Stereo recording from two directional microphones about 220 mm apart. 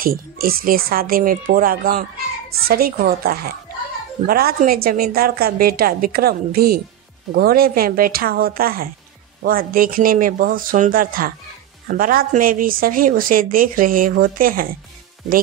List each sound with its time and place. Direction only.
0.0 s a woman's voice: 40° right (ahead or behind)